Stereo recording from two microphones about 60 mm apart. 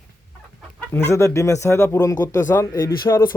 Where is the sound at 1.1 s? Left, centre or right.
Left.